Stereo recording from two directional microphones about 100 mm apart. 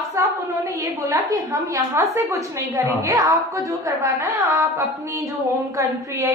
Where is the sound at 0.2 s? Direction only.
30° right (ahead or behind).